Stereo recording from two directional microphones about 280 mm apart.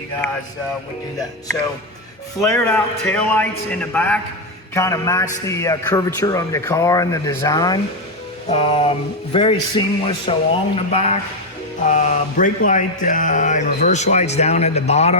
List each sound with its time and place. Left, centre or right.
2.4 s a man's voice: centre; by 15.2 s left